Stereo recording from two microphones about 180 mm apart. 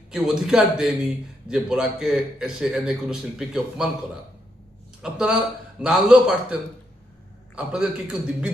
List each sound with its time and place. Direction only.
0.1 s a man's voice: 5° right (ahead or behind)
5.0 s a man's voice: 5° right (ahead or behind)